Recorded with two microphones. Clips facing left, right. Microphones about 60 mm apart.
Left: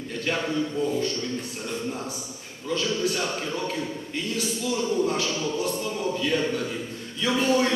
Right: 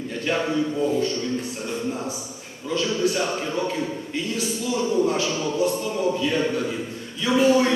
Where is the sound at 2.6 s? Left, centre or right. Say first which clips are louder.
Right 3 dB; centre.